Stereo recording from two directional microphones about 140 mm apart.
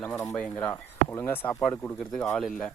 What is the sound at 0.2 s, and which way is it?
Speech, 15° left (ahead or behind).